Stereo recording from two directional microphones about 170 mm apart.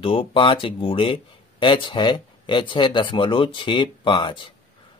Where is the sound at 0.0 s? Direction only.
30° left (ahead or behind).